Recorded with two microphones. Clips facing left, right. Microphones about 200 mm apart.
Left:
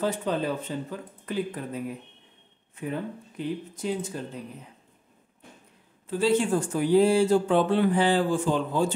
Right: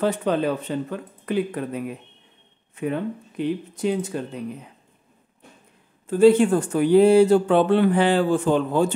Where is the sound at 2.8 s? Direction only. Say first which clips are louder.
Right 6 dB; 70° right (ahead or behind).